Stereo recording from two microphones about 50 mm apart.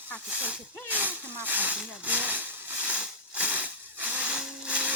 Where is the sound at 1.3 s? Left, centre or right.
Right.